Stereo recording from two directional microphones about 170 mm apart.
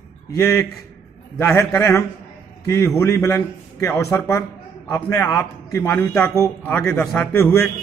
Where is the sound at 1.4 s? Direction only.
10° left (ahead or behind).